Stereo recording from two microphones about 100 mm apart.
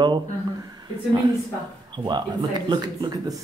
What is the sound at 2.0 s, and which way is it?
Speech, 45° right (ahead or behind).